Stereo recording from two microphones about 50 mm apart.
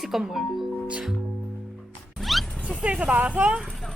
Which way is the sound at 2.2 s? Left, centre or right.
Centre.